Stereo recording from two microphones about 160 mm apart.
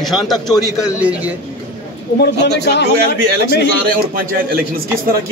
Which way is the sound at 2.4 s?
90° left.